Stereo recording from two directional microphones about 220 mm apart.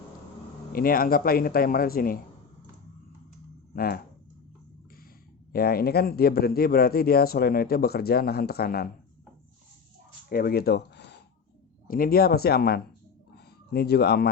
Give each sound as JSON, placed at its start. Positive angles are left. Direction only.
{"t": 0.7, "sound": "speech", "side_deg": 40}
{"t": 3.8, "sound": "a man's voice", "side_deg": 45}
{"t": 5.5, "sound": "a man's voice", "side_deg": 45}
{"t": 10.2, "sound": "a man's voice", "side_deg": 40}
{"t": 13.3, "sound": "a sound", "side_deg": 45}